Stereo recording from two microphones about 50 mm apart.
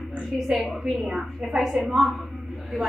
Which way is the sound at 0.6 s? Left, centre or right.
Centre.